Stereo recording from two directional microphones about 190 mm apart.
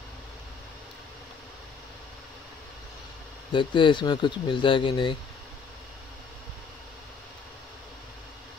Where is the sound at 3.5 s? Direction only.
25° left (ahead or behind).